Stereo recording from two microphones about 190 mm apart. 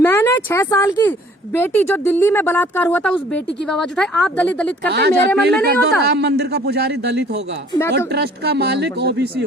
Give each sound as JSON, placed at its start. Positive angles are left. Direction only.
{"t": 0.0, "sound": "a woman's voice", "side_deg": 10}
{"t": 4.9, "sound": "speech", "side_deg": -60}